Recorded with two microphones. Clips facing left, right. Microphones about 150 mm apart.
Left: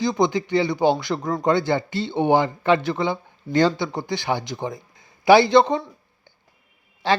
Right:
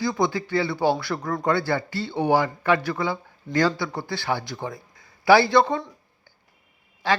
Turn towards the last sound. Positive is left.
turn(degrees=25)  # may be behind; listen again after turning